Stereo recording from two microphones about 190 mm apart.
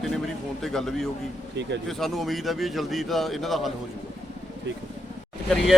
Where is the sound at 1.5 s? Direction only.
70° right (ahead or behind).